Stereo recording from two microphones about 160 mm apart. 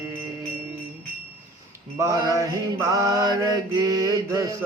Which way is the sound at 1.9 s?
20° right (ahead or behind).